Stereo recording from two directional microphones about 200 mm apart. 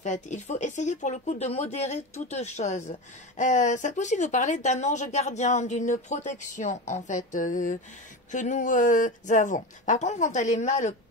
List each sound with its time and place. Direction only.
0.0 s speech: 35° left (ahead or behind)